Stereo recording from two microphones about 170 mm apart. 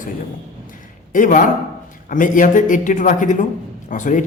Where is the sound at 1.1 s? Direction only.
50° left (ahead or behind).